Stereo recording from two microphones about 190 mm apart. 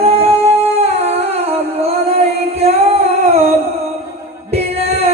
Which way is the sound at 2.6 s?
35° right (ahead or behind).